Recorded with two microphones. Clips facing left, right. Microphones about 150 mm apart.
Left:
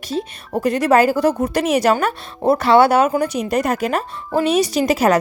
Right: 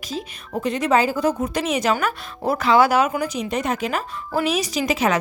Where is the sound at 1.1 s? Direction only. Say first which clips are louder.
Left 4 dB; 75° left (ahead or behind).